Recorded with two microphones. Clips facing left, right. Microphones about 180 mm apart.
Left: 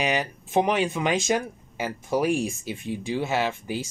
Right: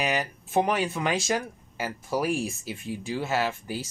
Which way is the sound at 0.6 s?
20° left (ahead or behind).